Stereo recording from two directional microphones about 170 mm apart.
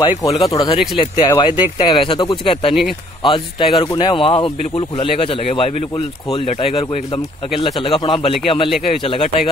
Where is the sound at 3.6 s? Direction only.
30° left (ahead or behind).